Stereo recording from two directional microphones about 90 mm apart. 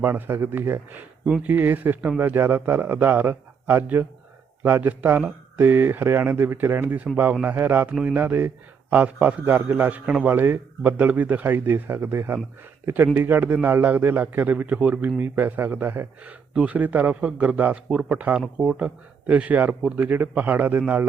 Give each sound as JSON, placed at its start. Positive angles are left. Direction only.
{"t": 0.0, "sound": "a man's voice", "side_deg": -25}